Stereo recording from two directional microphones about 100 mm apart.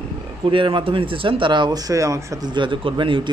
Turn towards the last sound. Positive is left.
turn(degrees=-55)  # may be behind; listen again after turning